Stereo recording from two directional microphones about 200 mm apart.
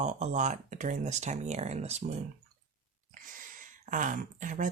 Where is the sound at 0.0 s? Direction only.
35° right (ahead or behind).